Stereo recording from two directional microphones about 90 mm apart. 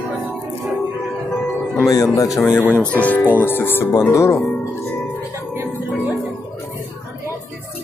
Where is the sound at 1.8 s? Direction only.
40° left (ahead or behind).